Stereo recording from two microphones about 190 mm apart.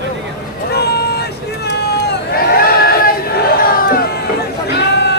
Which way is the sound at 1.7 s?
60° left (ahead or behind).